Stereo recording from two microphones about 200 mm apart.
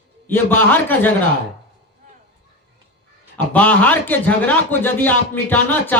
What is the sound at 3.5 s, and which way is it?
A man's voice, 5° left (ahead or behind).